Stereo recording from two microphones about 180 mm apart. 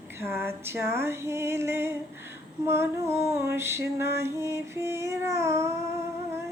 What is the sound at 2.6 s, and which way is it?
Female singing, 15° right (ahead or behind).